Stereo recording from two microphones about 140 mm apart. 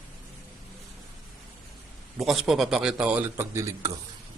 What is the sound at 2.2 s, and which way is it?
A man's voice, centre (ahead or behind).